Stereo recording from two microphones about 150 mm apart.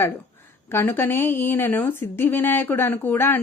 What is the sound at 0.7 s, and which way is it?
Speech, 15° left (ahead or behind).